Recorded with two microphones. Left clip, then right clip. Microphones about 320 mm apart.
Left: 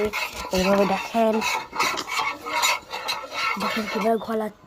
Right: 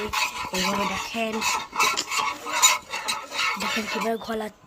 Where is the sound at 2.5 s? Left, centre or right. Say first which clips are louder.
Right 2 dB; right.